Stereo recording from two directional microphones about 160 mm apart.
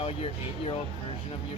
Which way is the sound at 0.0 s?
40° left (ahead or behind).